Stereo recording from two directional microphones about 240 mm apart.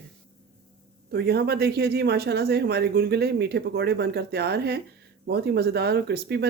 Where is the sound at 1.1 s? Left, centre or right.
Right.